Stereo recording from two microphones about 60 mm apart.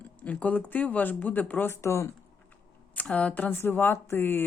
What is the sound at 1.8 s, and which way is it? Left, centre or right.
Speech, left.